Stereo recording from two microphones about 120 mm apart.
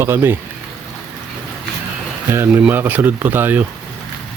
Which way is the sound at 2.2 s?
20° right (ahead or behind).